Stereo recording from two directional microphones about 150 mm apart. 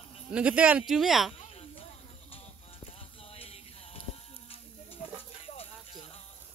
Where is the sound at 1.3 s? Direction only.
40° left (ahead or behind).